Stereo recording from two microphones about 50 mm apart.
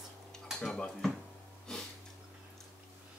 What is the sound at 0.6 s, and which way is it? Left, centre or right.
Speech, centre.